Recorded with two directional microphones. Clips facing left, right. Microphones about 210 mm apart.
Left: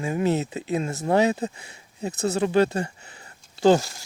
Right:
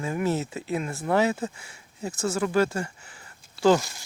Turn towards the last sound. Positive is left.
turn(degrees=20)  # may be behind; listen again after turning